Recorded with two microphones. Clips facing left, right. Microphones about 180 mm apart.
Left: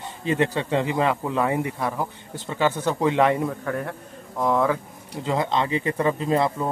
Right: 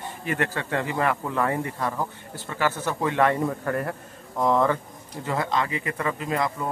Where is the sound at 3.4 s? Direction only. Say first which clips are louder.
Right 1 dB; centre (ahead or behind).